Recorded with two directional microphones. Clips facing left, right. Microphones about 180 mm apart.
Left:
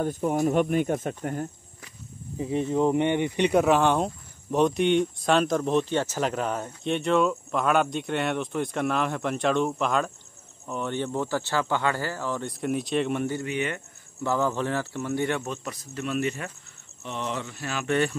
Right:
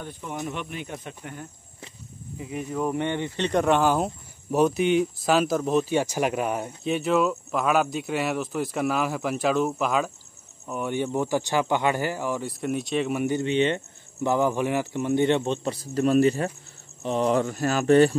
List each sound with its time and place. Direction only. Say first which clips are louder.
0.0 s speech: left 9 dB; 45° left (ahead or behind)
2.3 s speech: left 5 dB; 30° left (ahead or behind); by 13.3 s 5° right (ahead or behind)
13.3 s speech: right 6 dB; 25° right (ahead or behind)